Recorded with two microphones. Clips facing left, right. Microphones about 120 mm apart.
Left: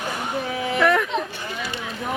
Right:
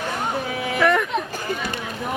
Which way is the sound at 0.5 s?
Centre (ahead or behind).